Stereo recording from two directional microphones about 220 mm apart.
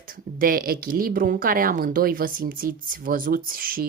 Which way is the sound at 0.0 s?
40° right (ahead or behind).